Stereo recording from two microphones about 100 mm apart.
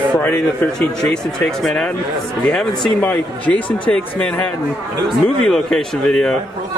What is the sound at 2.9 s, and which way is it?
Speech, 15° left (ahead or behind).